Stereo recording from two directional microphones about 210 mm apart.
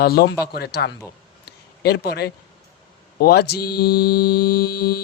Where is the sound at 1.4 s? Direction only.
50° left (ahead or behind).